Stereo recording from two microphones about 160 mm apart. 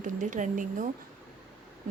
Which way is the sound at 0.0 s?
50° right (ahead or behind).